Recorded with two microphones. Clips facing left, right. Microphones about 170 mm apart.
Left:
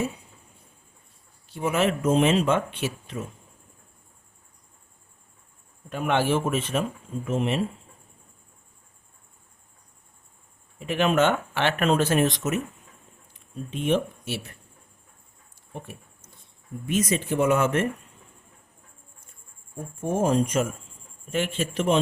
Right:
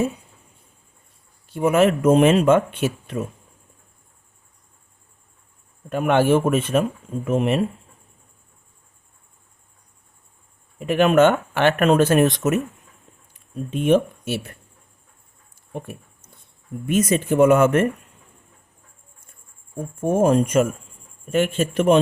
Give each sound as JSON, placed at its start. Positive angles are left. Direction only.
{"t": 1.5, "sound": "speech", "side_deg": -55}
{"t": 5.9, "sound": "speech", "side_deg": -50}
{"t": 10.8, "sound": "speech", "side_deg": -50}
{"t": 13.7, "sound": "speech", "side_deg": -50}
{"t": 16.8, "sound": "speech", "side_deg": -55}
{"t": 20.0, "sound": "speech", "side_deg": -55}